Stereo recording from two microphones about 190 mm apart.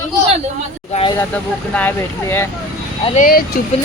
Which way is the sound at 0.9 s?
30° left (ahead or behind).